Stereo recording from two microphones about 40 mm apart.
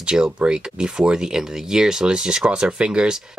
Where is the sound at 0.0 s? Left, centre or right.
Right.